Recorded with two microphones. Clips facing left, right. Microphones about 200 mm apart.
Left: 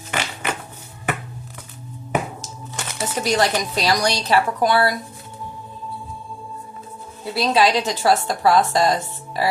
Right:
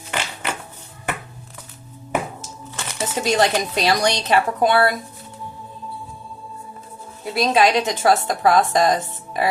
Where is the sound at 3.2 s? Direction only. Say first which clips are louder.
Right 1 dB; 25° right (ahead or behind).